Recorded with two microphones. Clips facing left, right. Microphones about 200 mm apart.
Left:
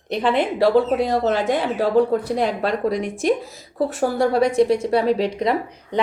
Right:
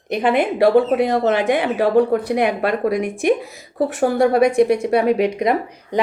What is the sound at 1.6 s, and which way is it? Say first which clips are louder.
Speech: right 2 dB; 65° right (ahead or behind).